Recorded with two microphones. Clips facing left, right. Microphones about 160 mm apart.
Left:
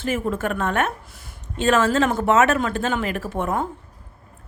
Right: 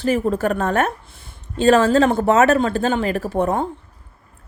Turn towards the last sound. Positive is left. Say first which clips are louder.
# right 5 dB
turn(degrees=-35)  # may be behind; listen again after turning